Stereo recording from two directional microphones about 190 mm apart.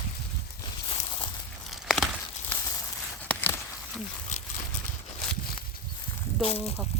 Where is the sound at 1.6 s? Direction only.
Centre (ahead or behind).